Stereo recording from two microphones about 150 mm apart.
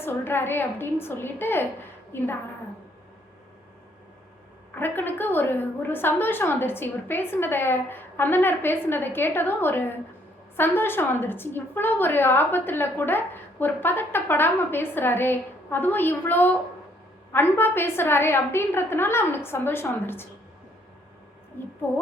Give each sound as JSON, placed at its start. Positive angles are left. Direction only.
{"t": 0.0, "sound": "a woman's voice", "side_deg": 15}
{"t": 4.7, "sound": "a woman's voice", "side_deg": 15}
{"t": 21.6, "sound": "a sound", "side_deg": 15}